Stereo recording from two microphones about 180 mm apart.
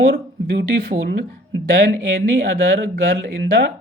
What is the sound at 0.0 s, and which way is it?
Speech, 55° right (ahead or behind).